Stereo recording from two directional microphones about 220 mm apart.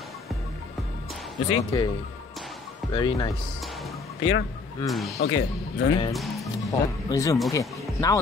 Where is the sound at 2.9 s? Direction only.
20° left (ahead or behind).